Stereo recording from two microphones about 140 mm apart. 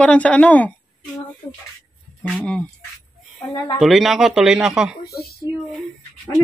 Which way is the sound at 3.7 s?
Centre (ahead or behind).